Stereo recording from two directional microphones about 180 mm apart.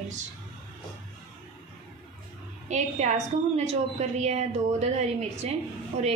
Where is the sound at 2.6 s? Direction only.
40° right (ahead or behind).